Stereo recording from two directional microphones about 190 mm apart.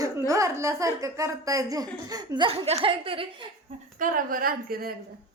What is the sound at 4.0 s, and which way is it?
Speech, 45° right (ahead or behind).